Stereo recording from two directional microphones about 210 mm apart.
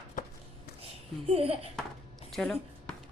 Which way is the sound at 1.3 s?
30° right (ahead or behind).